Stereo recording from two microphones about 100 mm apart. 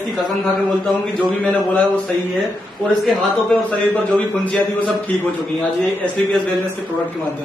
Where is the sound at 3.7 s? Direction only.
20° left (ahead or behind).